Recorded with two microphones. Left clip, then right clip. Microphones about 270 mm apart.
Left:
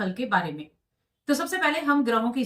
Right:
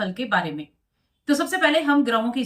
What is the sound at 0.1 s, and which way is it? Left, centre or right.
Speech, centre.